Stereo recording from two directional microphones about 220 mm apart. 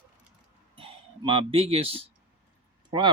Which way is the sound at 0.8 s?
25° right (ahead or behind).